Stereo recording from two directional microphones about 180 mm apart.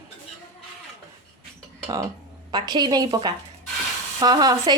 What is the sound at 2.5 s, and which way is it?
Speech, 25° right (ahead or behind).